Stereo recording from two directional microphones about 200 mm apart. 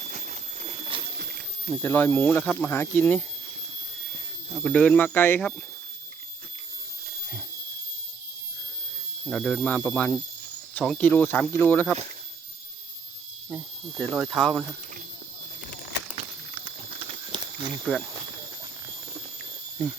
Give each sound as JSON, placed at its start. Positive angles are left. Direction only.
{"t": 0.1, "sound": "a sound", "side_deg": -35}
{"t": 1.7, "sound": "speech", "side_deg": 5}
{"t": 4.6, "sound": "speech", "side_deg": 5}
{"t": 9.2, "sound": "speech", "side_deg": 5}
{"t": 14.0, "sound": "speech", "side_deg": 0}
{"t": 16.1, "sound": "a sound", "side_deg": -25}
{"t": 17.8, "sound": "speech", "side_deg": 0}